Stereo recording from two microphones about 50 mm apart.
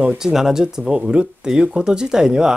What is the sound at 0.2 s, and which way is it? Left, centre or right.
Speech, centre.